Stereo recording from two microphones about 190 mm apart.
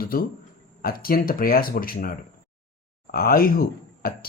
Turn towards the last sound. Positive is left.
turn(degrees=50)  # may be behind; listen again after turning